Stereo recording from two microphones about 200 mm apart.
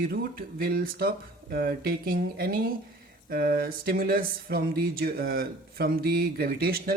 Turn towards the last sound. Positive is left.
turn(degrees=-50)  # may be behind; listen again after turning